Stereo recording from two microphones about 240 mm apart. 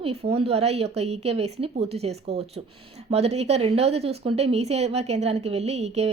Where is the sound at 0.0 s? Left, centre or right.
Right.